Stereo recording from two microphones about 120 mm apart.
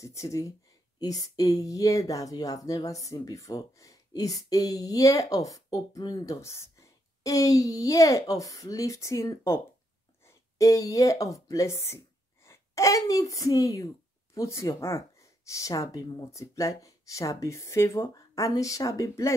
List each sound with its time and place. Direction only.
0.0 s a woman's voice: 25° left (ahead or behind)